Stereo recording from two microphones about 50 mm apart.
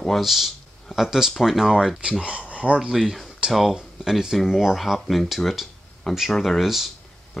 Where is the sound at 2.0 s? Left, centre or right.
Right.